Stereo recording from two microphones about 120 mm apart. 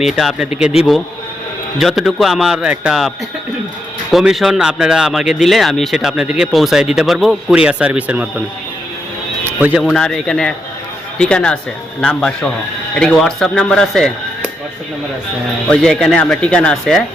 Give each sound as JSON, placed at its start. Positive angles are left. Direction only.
{"t": 0.0, "sound": "speech", "side_deg": 0}
{"t": 4.1, "sound": "speech", "side_deg": -5}
{"t": 9.4, "sound": "music", "side_deg": -15}
{"t": 9.9, "sound": "speech", "side_deg": 5}
{"t": 15.7, "sound": "speech", "side_deg": 5}